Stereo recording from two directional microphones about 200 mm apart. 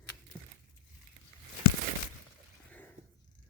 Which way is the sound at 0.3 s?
25° right (ahead or behind).